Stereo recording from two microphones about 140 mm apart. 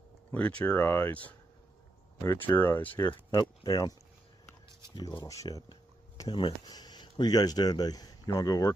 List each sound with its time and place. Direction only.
0.3 s speech: 10° left (ahead or behind)
2.5 s speech: 15° left (ahead or behind)
3.1 s speech: 30° left (ahead or behind)
4.9 s speech: 30° left (ahead or behind)